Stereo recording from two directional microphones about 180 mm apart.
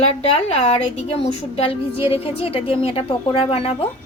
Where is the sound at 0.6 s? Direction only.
35° left (ahead or behind).